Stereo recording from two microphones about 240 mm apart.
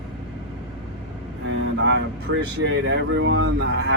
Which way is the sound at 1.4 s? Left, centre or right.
Right.